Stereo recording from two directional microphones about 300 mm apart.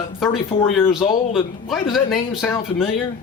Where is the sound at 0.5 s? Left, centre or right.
Centre.